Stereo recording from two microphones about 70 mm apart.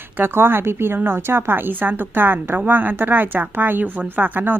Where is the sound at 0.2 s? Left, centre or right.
Right.